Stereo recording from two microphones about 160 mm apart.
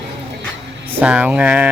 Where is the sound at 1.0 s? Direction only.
10° right (ahead or behind).